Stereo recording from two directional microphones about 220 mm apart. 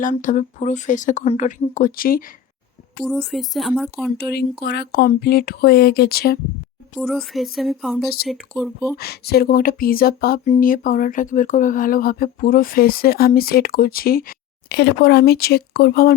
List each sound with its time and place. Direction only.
0.0 s speech: 35° left (ahead or behind)
3.0 s speech: centre (ahead or behind)
4.2 s speech: 45° left (ahead or behind)
6.9 s speech: centre (ahead or behind)
9.0 s speech: 45° left (ahead or behind)